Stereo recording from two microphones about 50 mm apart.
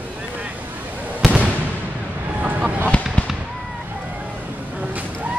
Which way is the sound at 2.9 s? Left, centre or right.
Left.